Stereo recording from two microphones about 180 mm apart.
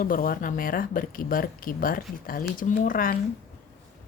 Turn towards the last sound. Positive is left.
turn(degrees=50)  # may be behind; listen again after turning